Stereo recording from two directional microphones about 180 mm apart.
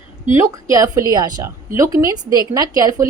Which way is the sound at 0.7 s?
20° right (ahead or behind).